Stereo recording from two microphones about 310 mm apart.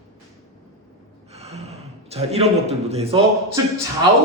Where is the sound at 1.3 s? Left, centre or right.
Centre.